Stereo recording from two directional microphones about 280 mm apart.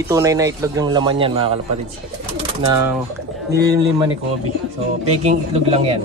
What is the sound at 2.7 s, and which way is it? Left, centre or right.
Speech, centre.